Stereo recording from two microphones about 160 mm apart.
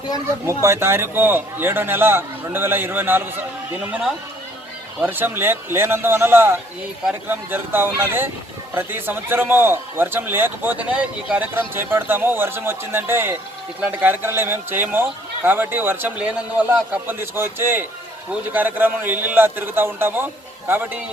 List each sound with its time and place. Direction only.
0.4 s a man's voice: 15° right (ahead or behind)
4.9 s a man's voice: 10° right (ahead or behind)